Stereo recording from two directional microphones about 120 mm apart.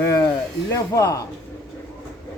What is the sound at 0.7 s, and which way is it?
Speech, 25° left (ahead or behind).